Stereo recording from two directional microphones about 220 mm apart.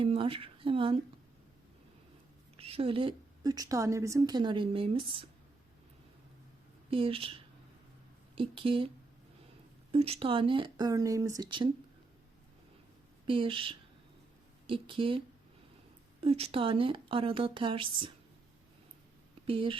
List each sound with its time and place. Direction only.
0.0 s a woman's voice: 25° right (ahead or behind)
2.6 s a woman's voice: 25° right (ahead or behind)
6.9 s a woman's voice: 25° right (ahead or behind)
9.9 s a woman's voice: 25° right (ahead or behind)
13.2 s a woman's voice: 25° right (ahead or behind)
16.2 s a woman's voice: 25° right (ahead or behind)
19.5 s a woman's voice: 25° right (ahead or behind)